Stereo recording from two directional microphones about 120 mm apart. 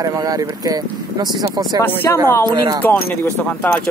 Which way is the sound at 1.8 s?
15° left (ahead or behind).